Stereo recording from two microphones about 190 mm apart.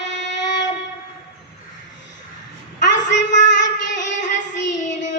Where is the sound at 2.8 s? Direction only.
70° left (ahead or behind).